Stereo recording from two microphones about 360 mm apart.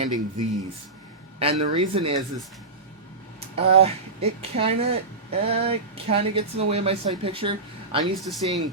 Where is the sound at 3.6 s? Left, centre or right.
Centre.